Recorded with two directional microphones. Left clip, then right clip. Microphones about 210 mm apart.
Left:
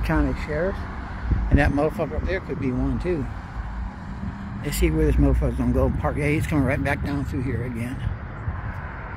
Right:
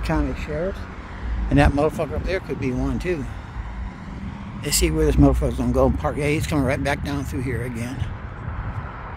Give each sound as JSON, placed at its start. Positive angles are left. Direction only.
{"t": 0.1, "sound": "speech", "side_deg": -5}
{"t": 1.5, "sound": "speech", "side_deg": -25}
{"t": 2.2, "sound": "speech", "side_deg": -45}
{"t": 4.6, "sound": "speech", "side_deg": -35}
{"t": 5.2, "sound": "speech", "side_deg": -20}
{"t": 7.1, "sound": "speech", "side_deg": -40}